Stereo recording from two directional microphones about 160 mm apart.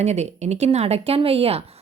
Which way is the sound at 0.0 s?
45° right (ahead or behind).